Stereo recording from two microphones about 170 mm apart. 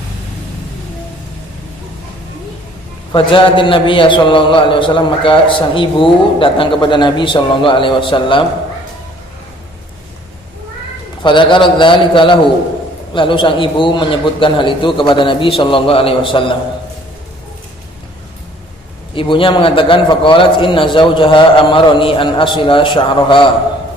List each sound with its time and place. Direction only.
3.1 s a man's voice: 30° left (ahead or behind)
11.2 s a man's voice: 30° left (ahead or behind)
19.1 s a man's voice: 30° left (ahead or behind)